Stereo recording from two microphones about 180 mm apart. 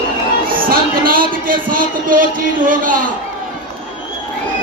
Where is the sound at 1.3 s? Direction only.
50° right (ahead or behind).